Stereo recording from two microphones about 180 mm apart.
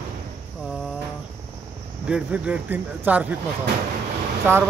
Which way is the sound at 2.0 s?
5° right (ahead or behind).